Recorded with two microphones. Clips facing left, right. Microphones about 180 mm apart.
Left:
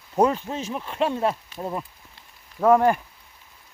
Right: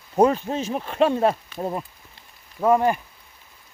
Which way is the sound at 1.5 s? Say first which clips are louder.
Right 2 dB; 20° right (ahead or behind).